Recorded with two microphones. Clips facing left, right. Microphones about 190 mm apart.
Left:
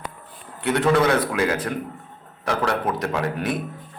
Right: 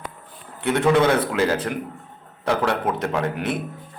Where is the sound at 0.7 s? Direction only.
20° right (ahead or behind).